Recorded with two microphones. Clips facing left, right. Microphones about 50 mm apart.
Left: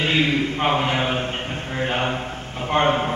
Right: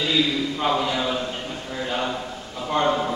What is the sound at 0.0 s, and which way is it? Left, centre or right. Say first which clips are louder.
A man's voice: left 2 dB; left.